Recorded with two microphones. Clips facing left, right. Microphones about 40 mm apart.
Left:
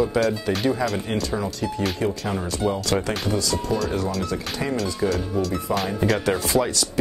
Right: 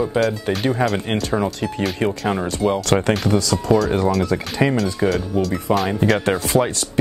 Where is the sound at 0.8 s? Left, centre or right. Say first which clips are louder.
Right 4 dB; right.